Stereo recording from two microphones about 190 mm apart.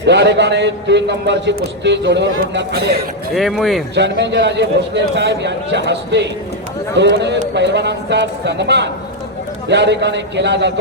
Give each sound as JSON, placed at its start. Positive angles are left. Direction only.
{"t": 0.1, "sound": "a man's voice", "side_deg": -65}
{"t": 3.3, "sound": "speech", "side_deg": 0}
{"t": 3.9, "sound": "a man's voice", "side_deg": -65}